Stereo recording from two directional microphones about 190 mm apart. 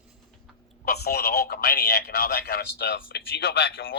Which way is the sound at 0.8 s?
55° left (ahead or behind).